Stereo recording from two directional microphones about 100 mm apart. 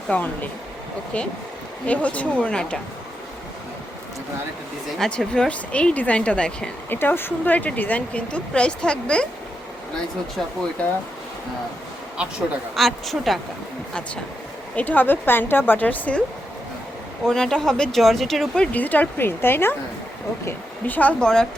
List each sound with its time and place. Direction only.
0.1 s speech: 20° left (ahead or behind)
1.9 s speech: 15° left (ahead or behind)
4.9 s speech: 5° left (ahead or behind)
7.0 s speech: 20° left (ahead or behind)
12.7 s speech: centre (ahead or behind)
14.8 s a woman's voice: 15° left (ahead or behind)
17.2 s speech: 5° left (ahead or behind)